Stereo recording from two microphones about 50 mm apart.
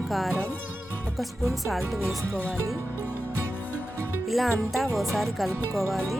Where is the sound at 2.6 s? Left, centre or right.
Right.